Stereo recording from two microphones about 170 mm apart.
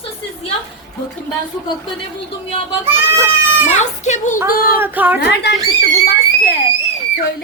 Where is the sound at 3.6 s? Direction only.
45° left (ahead or behind).